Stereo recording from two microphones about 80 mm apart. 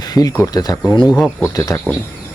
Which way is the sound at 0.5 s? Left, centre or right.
Left.